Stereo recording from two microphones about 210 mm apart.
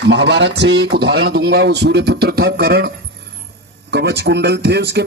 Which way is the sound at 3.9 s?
50° right (ahead or behind).